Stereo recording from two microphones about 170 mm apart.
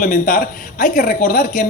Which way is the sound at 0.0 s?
50° left (ahead or behind).